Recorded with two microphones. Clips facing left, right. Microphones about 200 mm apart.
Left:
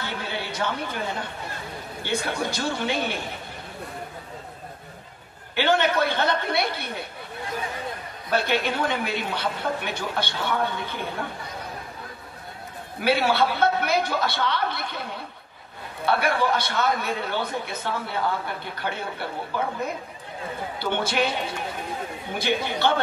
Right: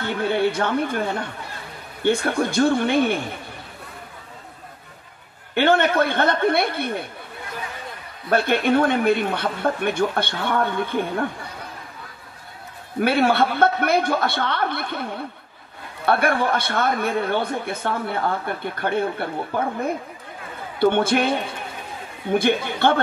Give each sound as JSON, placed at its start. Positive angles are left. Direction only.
{"t": 0.0, "sound": "a sound", "side_deg": -55}
{"t": 2.0, "sound": "speech", "side_deg": -55}
{"t": 5.5, "sound": "speech", "side_deg": -55}
{"t": 8.3, "sound": "speech", "side_deg": -55}
{"t": 13.0, "sound": "speech", "side_deg": -55}
{"t": 16.1, "sound": "speech", "side_deg": -55}